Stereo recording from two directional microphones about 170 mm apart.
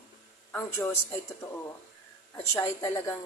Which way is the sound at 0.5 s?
10° left (ahead or behind).